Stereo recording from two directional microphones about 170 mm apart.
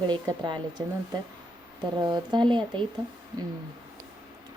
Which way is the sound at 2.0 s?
25° right (ahead or behind).